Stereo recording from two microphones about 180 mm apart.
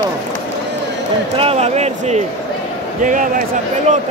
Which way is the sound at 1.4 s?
35° right (ahead or behind).